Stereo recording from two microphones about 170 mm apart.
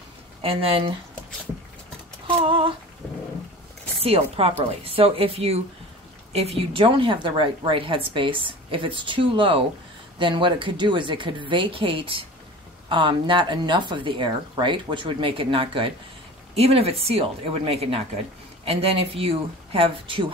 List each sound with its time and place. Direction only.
0.4 s a woman's voice: 35° right (ahead or behind)
2.2 s a woman's voice: 30° right (ahead or behind)
4.0 s a woman's voice: 35° right (ahead or behind)